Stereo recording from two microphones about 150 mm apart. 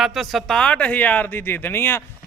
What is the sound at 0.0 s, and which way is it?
A man's voice, centre (ahead or behind).